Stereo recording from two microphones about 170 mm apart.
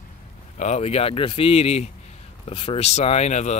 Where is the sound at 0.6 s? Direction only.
40° left (ahead or behind).